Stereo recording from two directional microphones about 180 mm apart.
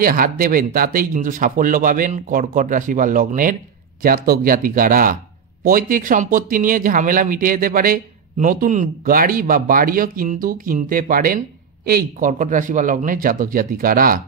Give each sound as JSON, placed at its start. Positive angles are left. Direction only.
{"t": 0.0, "sound": "speech", "side_deg": -50}